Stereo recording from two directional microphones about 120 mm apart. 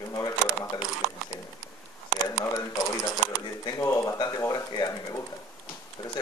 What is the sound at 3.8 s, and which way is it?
Speech, 25° left (ahead or behind).